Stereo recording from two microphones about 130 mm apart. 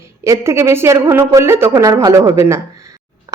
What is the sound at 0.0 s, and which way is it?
Speech, 20° right (ahead or behind).